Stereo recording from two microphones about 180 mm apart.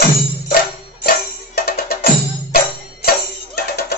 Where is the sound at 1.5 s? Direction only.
60° left (ahead or behind).